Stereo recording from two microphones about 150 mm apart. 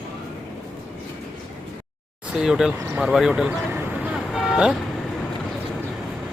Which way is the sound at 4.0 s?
5° right (ahead or behind).